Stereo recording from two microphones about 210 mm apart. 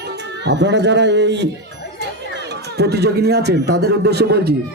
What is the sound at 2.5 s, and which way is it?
A man's voice, 50° right (ahead or behind).